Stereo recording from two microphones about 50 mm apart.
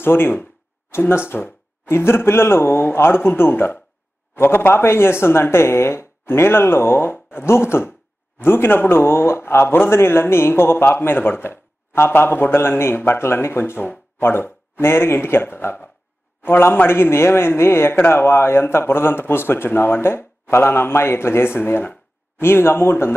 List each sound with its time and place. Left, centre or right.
0.0 s speech: left